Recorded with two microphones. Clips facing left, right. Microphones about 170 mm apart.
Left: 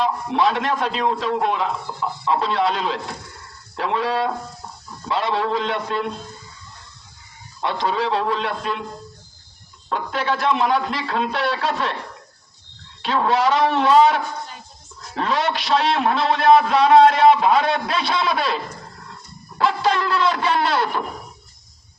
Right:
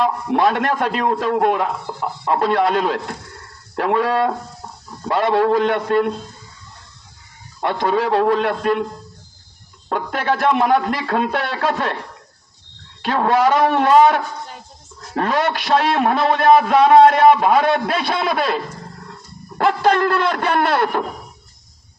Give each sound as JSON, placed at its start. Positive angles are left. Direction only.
{"t": 0.0, "sound": "a man's voice", "side_deg": -50}
{"t": 7.6, "sound": "a man's voice", "side_deg": -55}
{"t": 9.9, "sound": "a man's voice", "side_deg": -50}
{"t": 13.0, "sound": "a man's voice", "side_deg": -50}